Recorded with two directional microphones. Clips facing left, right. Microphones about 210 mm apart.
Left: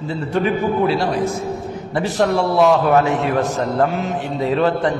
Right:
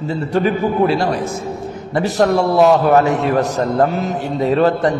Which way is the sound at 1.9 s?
40° right (ahead or behind).